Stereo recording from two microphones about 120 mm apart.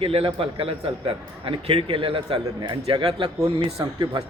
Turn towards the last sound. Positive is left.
turn(degrees=-40)  # may be behind; listen again after turning